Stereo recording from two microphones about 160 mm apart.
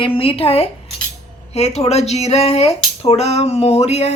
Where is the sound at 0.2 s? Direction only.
35° left (ahead or behind).